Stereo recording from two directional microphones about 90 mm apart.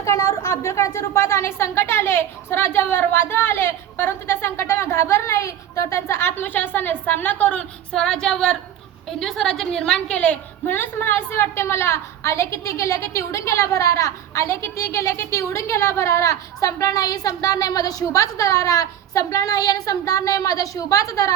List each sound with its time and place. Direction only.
0.0 s a woman's voice: 35° left (ahead or behind); by 7.6 s 15° left (ahead or behind)
7.9 s female singing: 5° left (ahead or behind)
9.0 s a woman's voice: 5° left (ahead or behind); by 21.3 s 35° left (ahead or behind)